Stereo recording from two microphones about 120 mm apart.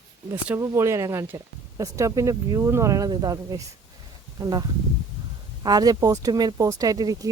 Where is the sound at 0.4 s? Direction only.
20° right (ahead or behind).